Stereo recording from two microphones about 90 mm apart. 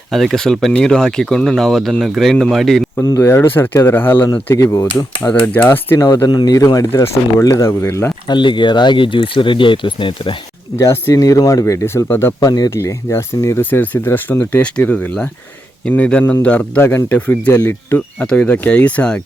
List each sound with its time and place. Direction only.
0.1 s speech: centre (ahead or behind)
3.0 s speech: 40° left (ahead or behind)
5.3 s speech: 20° left (ahead or behind)
6.2 s speech: 45° left (ahead or behind); by 8.1 s 30° left (ahead or behind)
8.3 s speech: 60° left (ahead or behind)
10.8 s speech: 30° left (ahead or behind)
11.1 s speech: 40° left (ahead or behind)
12.0 s speech: 25° left (ahead or behind)
12.4 s speech: 45° left (ahead or behind)
12.7 s speech: 30° left (ahead or behind); by 19.2 s 15° left (ahead or behind)